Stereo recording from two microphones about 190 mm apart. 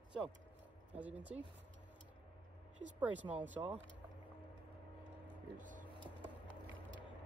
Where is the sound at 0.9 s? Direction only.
10° right (ahead or behind).